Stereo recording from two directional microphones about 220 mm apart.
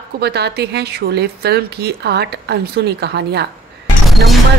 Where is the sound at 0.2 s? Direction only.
45° right (ahead or behind).